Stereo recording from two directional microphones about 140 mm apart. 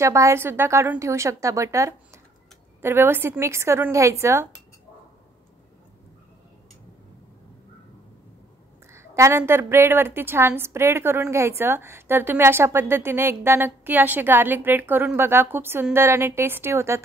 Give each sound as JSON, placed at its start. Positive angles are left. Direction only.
{"t": 0.0, "sound": "a woman's voice", "side_deg": -20}
{"t": 8.9, "sound": "a sound", "side_deg": -20}
{"t": 9.4, "sound": "a woman's voice", "side_deg": -15}